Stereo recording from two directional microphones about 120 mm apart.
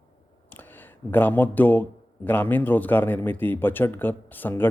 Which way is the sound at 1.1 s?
15° left (ahead or behind).